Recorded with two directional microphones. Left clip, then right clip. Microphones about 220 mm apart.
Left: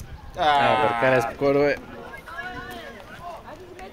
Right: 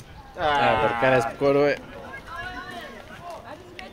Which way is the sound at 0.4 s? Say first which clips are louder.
Left 2 dB; 50° left (ahead or behind).